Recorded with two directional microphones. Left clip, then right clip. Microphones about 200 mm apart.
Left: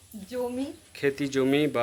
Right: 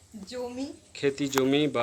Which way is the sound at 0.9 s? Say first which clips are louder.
Even; centre (ahead or behind).